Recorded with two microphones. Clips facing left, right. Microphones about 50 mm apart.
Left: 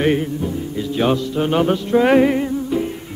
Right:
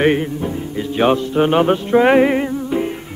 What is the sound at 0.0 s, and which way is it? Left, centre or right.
Music, right.